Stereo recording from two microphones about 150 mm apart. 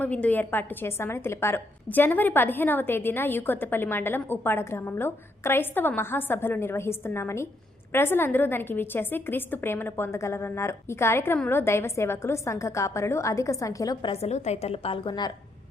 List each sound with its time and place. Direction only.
0.0 s a woman's voice: 10° left (ahead or behind)
14.1 s a woman's voice: 45° left (ahead or behind)